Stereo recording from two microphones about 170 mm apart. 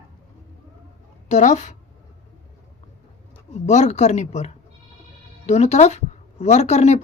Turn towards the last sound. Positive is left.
turn(degrees=40)  # may be behind; listen again after turning